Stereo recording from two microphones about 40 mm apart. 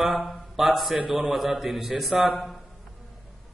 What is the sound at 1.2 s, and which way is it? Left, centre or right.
Speech, centre.